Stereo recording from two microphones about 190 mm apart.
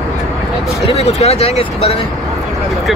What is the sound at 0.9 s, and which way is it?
Speech, 35° left (ahead or behind).